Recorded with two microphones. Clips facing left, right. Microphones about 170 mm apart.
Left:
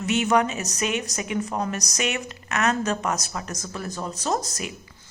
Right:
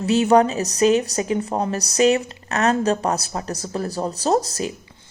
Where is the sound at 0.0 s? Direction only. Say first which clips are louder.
Right 6 dB; 35° right (ahead or behind).